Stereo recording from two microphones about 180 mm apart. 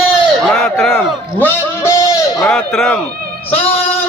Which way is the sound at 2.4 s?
5° left (ahead or behind).